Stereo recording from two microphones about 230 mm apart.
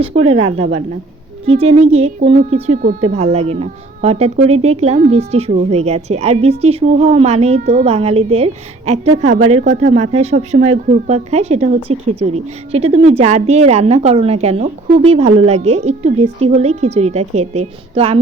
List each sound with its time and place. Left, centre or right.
0.0 s speech: right